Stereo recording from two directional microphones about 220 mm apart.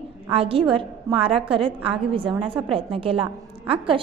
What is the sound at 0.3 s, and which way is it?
A woman's voice, 25° right (ahead or behind).